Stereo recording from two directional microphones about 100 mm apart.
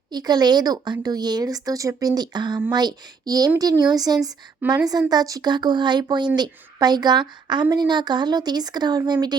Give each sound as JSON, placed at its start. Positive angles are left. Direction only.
{"t": 0.1, "sound": "speech", "side_deg": -45}